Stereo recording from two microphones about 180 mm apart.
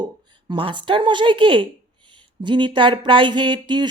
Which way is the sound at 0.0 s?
25° right (ahead or behind).